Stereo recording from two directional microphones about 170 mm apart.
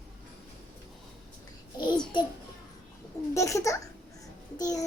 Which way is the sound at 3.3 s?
15° left (ahead or behind).